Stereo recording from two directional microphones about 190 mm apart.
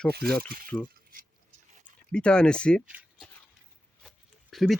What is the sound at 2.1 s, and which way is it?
Speech, 5° left (ahead or behind).